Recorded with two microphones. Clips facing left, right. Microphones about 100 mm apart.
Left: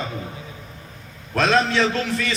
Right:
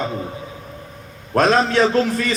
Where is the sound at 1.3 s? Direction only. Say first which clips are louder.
Right 4 dB; 40° right (ahead or behind).